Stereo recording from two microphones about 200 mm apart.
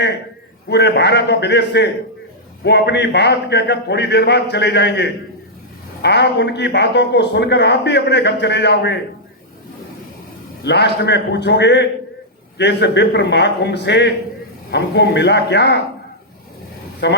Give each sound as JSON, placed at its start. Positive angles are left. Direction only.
{"t": 0.7, "sound": "a man's voice", "side_deg": 60}
{"t": 10.6, "sound": "a man's voice", "side_deg": 55}
{"t": 17.0, "sound": "a man's voice", "side_deg": 55}